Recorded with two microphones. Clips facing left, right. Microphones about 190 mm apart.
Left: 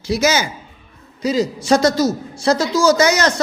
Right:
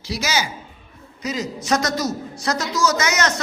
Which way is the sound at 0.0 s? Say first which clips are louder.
Left 7 dB; 50° left (ahead or behind).